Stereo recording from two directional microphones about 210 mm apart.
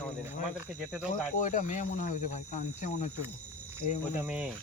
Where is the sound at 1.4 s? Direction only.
35° left (ahead or behind).